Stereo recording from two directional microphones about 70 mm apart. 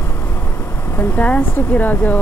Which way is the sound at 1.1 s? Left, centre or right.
Left.